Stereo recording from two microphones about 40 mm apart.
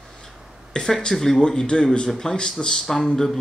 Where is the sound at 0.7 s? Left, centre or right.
Centre.